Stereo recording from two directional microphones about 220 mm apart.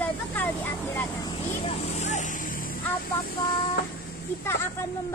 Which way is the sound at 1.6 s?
30° left (ahead or behind).